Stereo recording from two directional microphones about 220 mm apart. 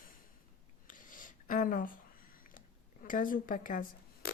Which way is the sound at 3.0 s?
40° left (ahead or behind).